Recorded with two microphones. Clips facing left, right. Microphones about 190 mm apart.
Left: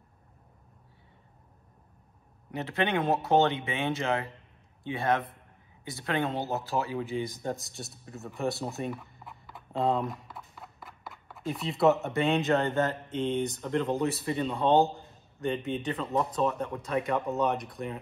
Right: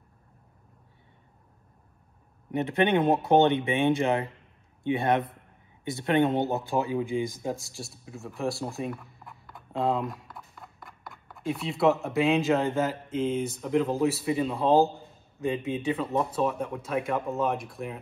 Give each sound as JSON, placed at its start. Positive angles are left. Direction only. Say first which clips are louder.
{"t": 2.5, "sound": "speech", "louder": "right 5 dB", "side_deg": -20}
{"t": 6.4, "sound": "speech", "louder": "right 4 dB", "side_deg": 0}
{"t": 6.8, "sound": "speech", "louder": "right 4 dB", "side_deg": -15}
{"t": 7.3, "sound": "speech", "louder": "right 2 dB", "side_deg": 0}